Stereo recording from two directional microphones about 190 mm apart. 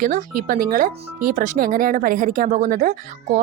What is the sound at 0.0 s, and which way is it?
Speech, 45° right (ahead or behind).